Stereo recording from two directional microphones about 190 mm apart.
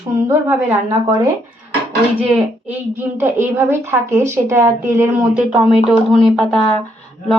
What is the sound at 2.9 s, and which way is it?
A woman's voice, 10° right (ahead or behind).